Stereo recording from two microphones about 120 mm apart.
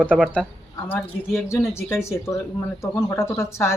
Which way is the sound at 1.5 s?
20° left (ahead or behind).